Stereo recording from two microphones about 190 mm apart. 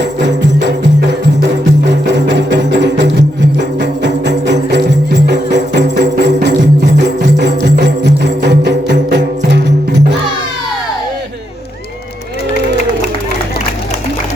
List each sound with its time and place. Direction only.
1.9 s music: 65° right (ahead or behind)
7.3 s music: 65° right (ahead or behind)